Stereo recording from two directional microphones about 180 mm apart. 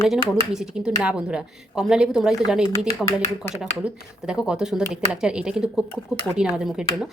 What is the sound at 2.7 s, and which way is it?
Speech, 15° left (ahead or behind).